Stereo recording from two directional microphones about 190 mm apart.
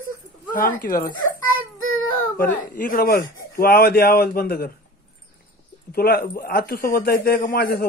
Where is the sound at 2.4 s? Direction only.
45° left (ahead or behind).